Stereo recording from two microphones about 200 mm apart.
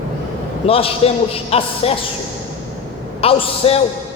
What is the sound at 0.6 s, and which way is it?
A man's voice, 30° left (ahead or behind).